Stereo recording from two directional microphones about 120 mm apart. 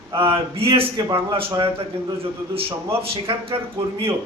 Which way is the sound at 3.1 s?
50° right (ahead or behind).